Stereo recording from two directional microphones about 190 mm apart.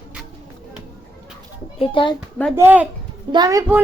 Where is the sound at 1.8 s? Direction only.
25° left (ahead or behind).